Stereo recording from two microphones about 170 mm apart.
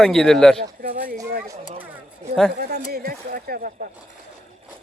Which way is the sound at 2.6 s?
65° right (ahead or behind).